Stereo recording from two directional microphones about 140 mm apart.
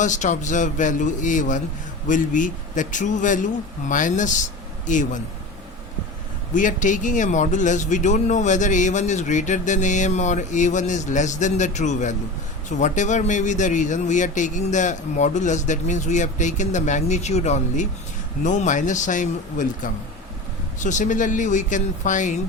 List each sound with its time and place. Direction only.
0.0 s speech: 60° left (ahead or behind)
6.5 s speech: 65° left (ahead or behind)